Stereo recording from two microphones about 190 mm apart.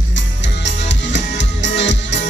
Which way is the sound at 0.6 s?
70° left (ahead or behind).